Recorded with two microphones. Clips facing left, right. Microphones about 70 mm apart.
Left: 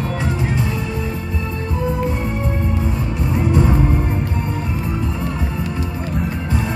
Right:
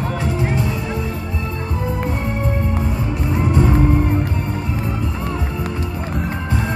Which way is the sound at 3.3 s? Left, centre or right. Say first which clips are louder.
Even; right.